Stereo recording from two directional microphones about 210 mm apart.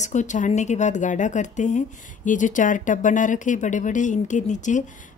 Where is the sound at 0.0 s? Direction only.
35° left (ahead or behind).